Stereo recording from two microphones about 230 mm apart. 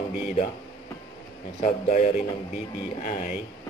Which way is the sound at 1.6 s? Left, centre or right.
Left.